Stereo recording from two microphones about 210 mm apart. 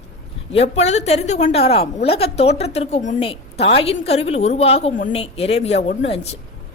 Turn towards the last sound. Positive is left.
turn(degrees=30)  # may be behind; listen again after turning